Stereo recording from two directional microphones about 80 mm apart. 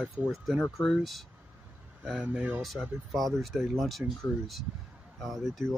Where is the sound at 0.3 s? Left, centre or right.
Centre.